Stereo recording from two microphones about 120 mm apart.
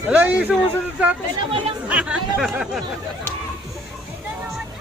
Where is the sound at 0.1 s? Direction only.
10° right (ahead or behind).